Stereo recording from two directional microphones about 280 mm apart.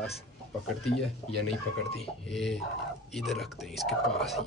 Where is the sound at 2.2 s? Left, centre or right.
Centre.